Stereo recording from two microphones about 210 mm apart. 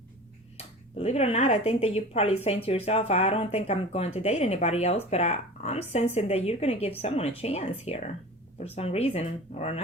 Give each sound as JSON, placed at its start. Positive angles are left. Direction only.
{"t": 0.5, "sound": "speech", "side_deg": 30}